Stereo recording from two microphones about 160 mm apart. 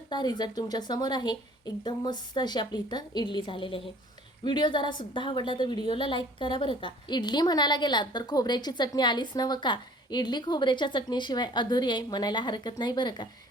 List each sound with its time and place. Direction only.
0.1 s a woman's voice: 25° left (ahead or behind)